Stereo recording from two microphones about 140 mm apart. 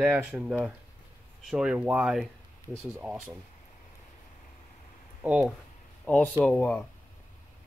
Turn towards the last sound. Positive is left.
turn(degrees=15)  # may be behind; listen again after turning